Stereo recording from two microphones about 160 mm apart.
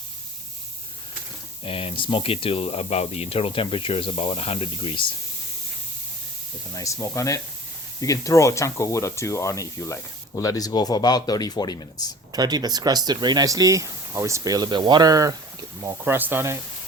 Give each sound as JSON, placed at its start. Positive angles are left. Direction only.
{"t": 1.6, "sound": "speech", "side_deg": 35}
{"t": 6.7, "sound": "speech", "side_deg": 20}
{"t": 12.3, "sound": "speech", "side_deg": -25}